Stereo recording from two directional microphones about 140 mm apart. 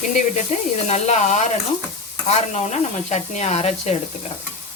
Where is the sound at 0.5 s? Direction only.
60° left (ahead or behind).